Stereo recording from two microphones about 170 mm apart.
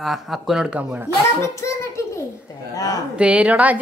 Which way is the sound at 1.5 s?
15° left (ahead or behind).